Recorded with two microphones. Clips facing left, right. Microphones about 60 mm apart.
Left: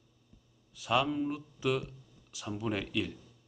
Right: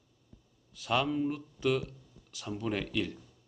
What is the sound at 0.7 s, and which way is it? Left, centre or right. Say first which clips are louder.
Speech: even; centre.